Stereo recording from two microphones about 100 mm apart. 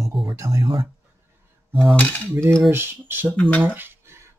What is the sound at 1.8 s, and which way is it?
Cutlery, 5° left (ahead or behind).